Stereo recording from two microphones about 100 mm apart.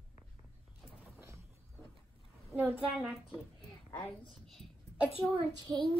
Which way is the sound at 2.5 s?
15° right (ahead or behind).